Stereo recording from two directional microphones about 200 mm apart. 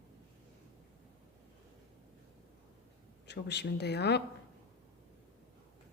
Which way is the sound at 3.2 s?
60° left (ahead or behind).